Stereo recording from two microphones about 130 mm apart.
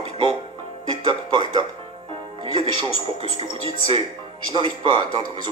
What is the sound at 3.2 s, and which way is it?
Speech, 40° right (ahead or behind).